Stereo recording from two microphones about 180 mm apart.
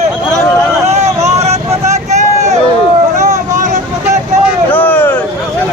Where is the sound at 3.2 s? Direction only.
40° right (ahead or behind).